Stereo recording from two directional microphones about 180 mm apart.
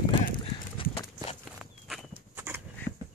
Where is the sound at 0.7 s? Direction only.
30° left (ahead or behind).